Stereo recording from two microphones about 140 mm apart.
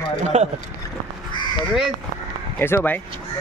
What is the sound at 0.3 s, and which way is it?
Speech, 55° right (ahead or behind).